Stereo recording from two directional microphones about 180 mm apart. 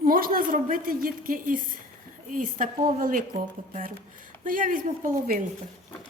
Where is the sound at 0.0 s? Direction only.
50° right (ahead or behind).